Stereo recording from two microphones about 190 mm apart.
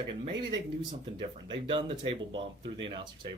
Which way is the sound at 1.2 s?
25° right (ahead or behind).